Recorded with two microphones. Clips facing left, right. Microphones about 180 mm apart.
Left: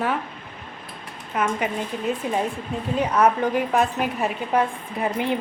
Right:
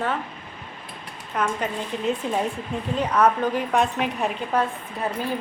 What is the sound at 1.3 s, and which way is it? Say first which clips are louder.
A woman's voice: left 2 dB; 5° left (ahead or behind).